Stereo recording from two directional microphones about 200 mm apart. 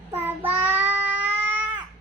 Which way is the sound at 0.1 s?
10° right (ahead or behind).